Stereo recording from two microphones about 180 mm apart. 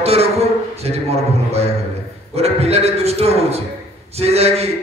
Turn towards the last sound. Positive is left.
turn(degrees=-35)  # may be behind; listen again after turning